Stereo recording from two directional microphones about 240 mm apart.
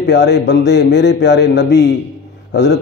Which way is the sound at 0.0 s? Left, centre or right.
Left.